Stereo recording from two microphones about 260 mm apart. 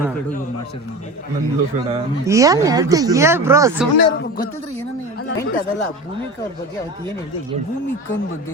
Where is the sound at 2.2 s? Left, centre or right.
Centre.